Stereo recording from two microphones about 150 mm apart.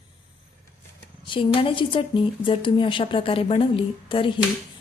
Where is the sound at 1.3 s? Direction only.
35° left (ahead or behind).